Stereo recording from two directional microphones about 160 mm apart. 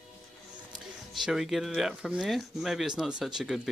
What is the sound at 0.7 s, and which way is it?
Speech, centre (ahead or behind).